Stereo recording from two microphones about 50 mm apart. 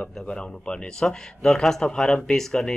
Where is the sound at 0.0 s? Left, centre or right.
Left.